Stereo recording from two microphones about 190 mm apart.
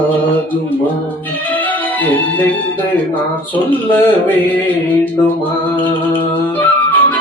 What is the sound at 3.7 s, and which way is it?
Speech, 10° left (ahead or behind).